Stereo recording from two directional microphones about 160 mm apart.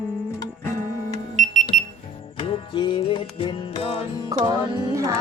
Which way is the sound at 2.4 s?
35° left (ahead or behind).